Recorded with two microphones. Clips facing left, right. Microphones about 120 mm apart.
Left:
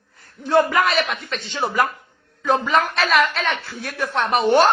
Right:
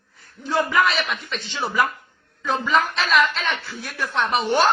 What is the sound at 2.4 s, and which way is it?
A woman's voice, 55° left (ahead or behind).